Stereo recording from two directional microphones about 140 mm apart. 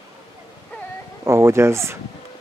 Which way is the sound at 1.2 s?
20° right (ahead or behind).